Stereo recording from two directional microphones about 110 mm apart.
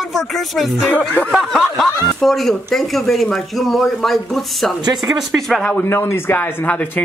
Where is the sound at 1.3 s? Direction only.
Centre (ahead or behind).